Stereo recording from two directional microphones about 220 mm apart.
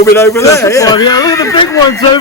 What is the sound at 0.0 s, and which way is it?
Speech, 15° left (ahead or behind).